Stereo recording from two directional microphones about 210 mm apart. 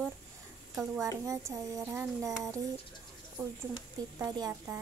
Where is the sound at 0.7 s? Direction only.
15° right (ahead or behind).